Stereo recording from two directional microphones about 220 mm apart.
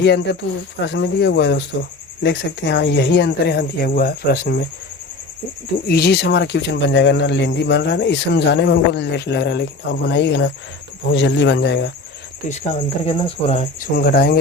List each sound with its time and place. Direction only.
0.0 s speech: 50° left (ahead or behind)
5.9 s speech: 50° left (ahead or behind)
12.5 s speech: 30° left (ahead or behind)